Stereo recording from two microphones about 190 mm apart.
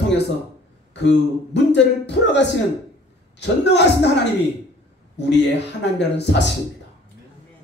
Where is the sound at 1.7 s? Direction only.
65° left (ahead or behind).